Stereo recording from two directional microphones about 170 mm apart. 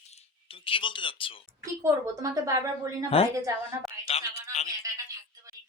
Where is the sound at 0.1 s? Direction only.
35° left (ahead or behind).